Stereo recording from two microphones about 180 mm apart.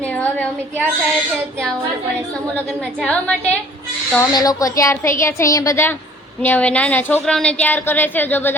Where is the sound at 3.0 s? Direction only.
5° left (ahead or behind).